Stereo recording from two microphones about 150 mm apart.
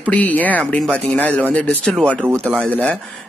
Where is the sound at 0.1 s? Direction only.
10° left (ahead or behind).